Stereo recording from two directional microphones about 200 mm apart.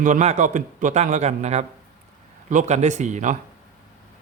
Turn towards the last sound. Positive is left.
turn(degrees=-35)  # may be behind; listen again after turning